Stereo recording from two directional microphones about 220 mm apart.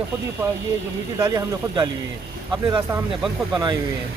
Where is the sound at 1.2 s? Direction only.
20° right (ahead or behind).